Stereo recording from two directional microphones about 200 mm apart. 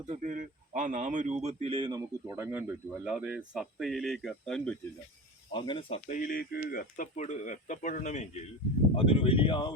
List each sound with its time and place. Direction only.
0.1 s speech: 40° right (ahead or behind); by 4.8 s 5° left (ahead or behind)
5.5 s speech: 25° left (ahead or behind)
6.1 s speech: 45° left (ahead or behind); by 9.7 s 25° left (ahead or behind)